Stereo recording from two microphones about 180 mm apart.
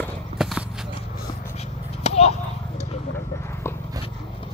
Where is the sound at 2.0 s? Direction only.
35° left (ahead or behind).